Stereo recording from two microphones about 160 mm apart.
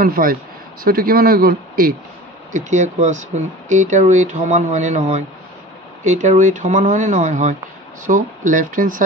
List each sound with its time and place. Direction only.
0.0 s speech: 65° right (ahead or behind)
2.5 s speech: 50° right (ahead or behind)